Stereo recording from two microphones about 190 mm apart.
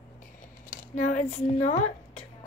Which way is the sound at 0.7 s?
40° left (ahead or behind).